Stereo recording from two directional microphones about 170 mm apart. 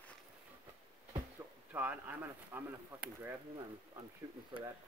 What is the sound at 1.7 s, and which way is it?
Speech, 10° right (ahead or behind).